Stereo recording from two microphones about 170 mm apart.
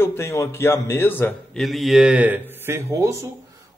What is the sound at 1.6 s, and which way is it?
Speech, centre (ahead or behind).